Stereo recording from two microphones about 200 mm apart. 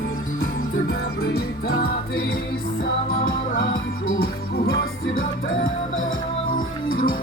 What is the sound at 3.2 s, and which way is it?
Music, 75° left (ahead or behind).